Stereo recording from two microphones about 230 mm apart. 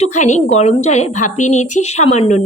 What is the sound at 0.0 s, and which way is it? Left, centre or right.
A woman's voice, left.